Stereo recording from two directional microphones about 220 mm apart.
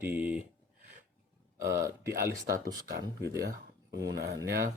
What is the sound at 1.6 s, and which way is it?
Speech, 15° right (ahead or behind).